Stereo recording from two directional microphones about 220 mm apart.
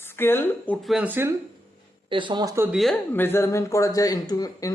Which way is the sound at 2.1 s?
20° right (ahead or behind).